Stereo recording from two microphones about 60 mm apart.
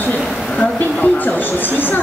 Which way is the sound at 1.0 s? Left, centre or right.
Left.